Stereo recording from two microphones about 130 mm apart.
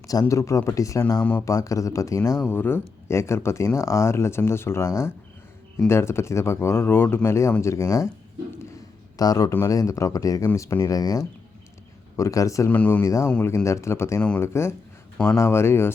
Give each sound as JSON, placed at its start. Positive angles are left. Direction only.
{"t": 0.1, "sound": "speech", "side_deg": 25}
{"t": 1.2, "sound": "speech", "side_deg": 15}
{"t": 1.5, "sound": "speech", "side_deg": 25}
{"t": 9.1, "sound": "speech", "side_deg": 30}
{"t": 12.7, "sound": "speech", "side_deg": 15}
{"t": 13.1, "sound": "speech", "side_deg": 25}
{"t": 14.2, "sound": "speech", "side_deg": 10}
{"t": 14.4, "sound": "speech", "side_deg": 20}